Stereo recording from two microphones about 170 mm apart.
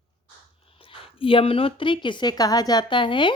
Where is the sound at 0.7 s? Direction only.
35° left (ahead or behind).